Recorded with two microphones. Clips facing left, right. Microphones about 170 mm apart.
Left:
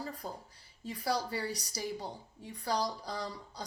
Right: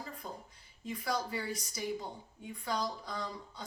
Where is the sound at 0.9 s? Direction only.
35° left (ahead or behind).